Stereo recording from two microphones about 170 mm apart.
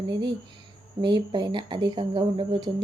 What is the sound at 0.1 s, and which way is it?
Speech, 25° right (ahead or behind).